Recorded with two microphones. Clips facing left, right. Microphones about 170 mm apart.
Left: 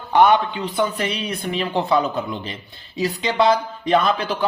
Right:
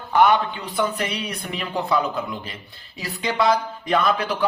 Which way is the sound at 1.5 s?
25° left (ahead or behind).